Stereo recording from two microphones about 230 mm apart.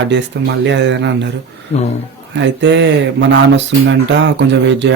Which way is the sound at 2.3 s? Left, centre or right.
Right.